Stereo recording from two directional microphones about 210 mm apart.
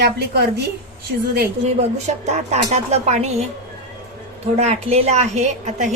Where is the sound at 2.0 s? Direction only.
30° right (ahead or behind).